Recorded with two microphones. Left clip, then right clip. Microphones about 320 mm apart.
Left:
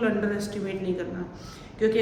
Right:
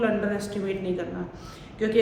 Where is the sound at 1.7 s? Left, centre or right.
Centre.